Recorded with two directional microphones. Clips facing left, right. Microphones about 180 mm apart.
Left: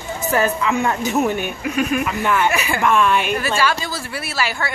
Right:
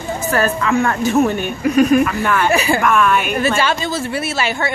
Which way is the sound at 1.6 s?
40° right (ahead or behind).